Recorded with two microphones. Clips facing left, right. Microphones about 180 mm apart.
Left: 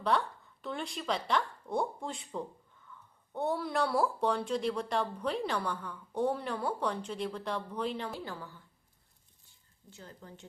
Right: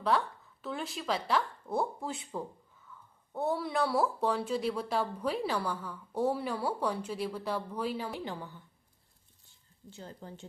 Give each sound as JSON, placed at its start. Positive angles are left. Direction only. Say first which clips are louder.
{"t": 0.0, "sound": "a woman's voice", "louder": "right 1 dB", "side_deg": 0}
{"t": 8.2, "sound": "a woman's voice", "louder": "right 3 dB", "side_deg": -20}
{"t": 9.9, "sound": "speech", "louder": "right 4 dB", "side_deg": -30}